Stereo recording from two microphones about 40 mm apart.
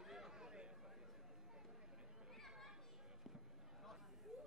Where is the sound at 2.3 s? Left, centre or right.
Centre.